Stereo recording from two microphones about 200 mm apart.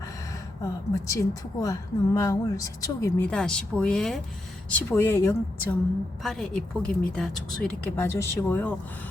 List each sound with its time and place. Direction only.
0.6 s a woman's voice: 15° left (ahead or behind)
3.2 s a woman's voice: 5° left (ahead or behind)
6.2 s speech: centre (ahead or behind)